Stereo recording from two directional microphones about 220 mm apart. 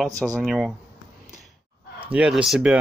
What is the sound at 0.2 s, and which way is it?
Speech, centre (ahead or behind).